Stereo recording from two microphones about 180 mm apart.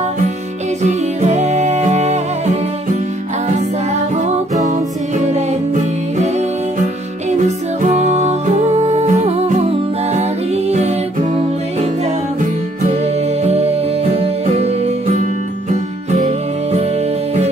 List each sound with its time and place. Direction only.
0.8 s music: 40° right (ahead or behind)
4.6 s music: 40° right (ahead or behind)
13.0 s music: 35° right (ahead or behind)